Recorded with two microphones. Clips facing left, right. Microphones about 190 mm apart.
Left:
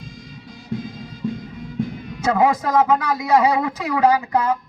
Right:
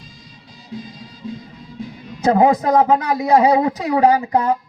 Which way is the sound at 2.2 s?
35° right (ahead or behind).